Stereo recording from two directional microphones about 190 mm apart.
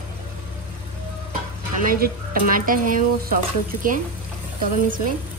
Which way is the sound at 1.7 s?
50° right (ahead or behind).